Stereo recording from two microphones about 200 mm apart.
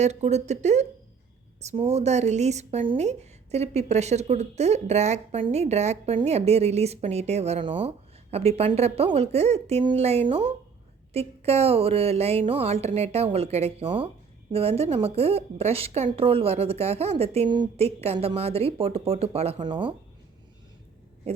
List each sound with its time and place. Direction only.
0.0 s a woman's voice: 35° right (ahead or behind)